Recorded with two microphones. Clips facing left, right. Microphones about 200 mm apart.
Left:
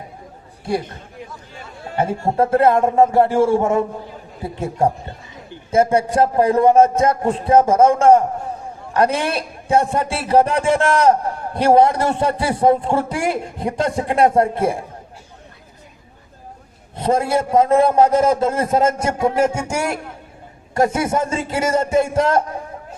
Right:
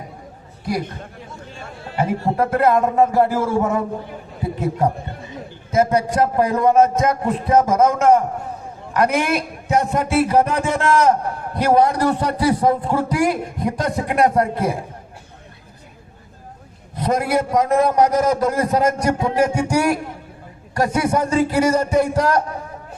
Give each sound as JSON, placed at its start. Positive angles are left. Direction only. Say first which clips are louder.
{"t": 2.3, "sound": "a man's voice", "louder": "left 3 dB", "side_deg": 30}
{"t": 5.7, "sound": "a man's voice", "louder": "left 2 dB", "side_deg": 30}
{"t": 16.9, "sound": "a man's voice", "louder": "left 1 dB", "side_deg": 25}